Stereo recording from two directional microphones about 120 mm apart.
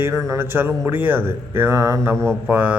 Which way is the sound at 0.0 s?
25° right (ahead or behind).